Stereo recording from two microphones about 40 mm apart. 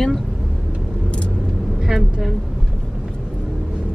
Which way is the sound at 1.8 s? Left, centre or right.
Centre.